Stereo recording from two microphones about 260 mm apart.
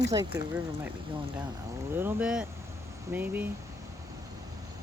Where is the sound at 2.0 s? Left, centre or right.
Centre.